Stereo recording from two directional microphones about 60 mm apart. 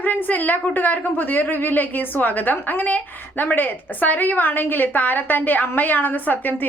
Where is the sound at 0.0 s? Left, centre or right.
Left.